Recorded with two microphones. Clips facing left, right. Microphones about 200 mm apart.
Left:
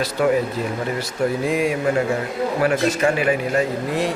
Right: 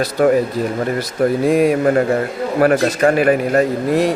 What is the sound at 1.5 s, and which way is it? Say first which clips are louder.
A man's voice: right 7 dB; 50° right (ahead or behind).